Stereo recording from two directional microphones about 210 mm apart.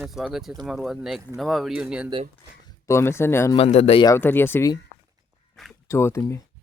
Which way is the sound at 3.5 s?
30° left (ahead or behind).